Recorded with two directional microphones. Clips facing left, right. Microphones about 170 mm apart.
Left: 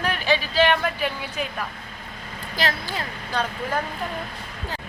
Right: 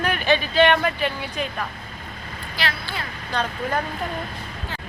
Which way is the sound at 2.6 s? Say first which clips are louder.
Left 3 dB; 45° left (ahead or behind).